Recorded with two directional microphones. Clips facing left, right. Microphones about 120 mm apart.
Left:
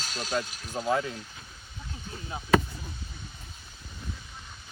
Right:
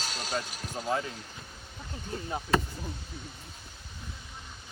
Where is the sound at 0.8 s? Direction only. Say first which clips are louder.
Left 4 dB; 15° left (ahead or behind).